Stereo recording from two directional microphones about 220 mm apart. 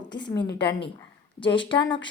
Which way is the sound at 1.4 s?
20° left (ahead or behind).